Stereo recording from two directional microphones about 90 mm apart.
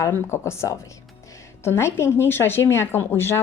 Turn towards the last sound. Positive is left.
turn(degrees=25)  # may be behind; listen again after turning